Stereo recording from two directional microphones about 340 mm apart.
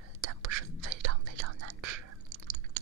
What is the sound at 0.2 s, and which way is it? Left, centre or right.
Whispering, right.